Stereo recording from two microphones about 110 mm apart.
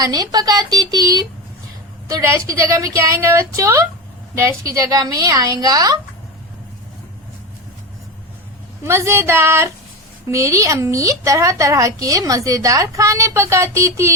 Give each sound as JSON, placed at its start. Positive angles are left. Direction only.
{"t": 0.0, "sound": "a woman's voice", "side_deg": -35}
{"t": 8.8, "sound": "a woman's voice", "side_deg": -25}